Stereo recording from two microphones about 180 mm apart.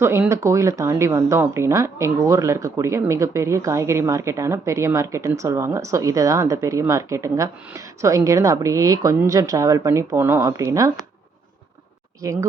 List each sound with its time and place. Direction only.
0.0 s speech: 15° right (ahead or behind)
12.2 s speech: 15° right (ahead or behind)